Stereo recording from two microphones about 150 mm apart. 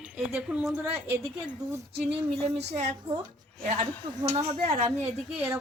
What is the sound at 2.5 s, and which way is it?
Speech, 45° right (ahead or behind).